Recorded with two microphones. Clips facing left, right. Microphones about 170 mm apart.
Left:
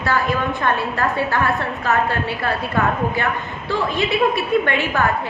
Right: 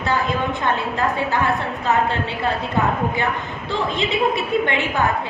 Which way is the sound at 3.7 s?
20° right (ahead or behind).